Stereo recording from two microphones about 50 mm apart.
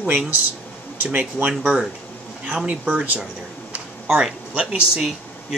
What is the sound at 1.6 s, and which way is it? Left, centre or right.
Speech, centre.